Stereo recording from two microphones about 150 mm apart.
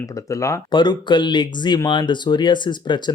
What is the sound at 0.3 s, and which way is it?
Speech, 20° left (ahead or behind).